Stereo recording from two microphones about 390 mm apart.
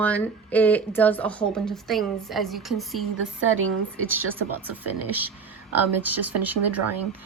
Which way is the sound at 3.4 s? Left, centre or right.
Right.